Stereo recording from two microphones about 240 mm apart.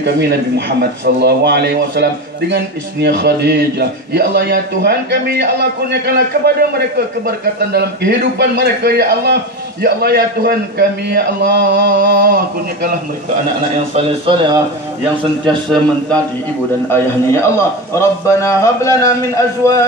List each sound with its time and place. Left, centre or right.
0.0 s a man's voice: right
13.9 s a man's voice: right
16.9 s a man's voice: centre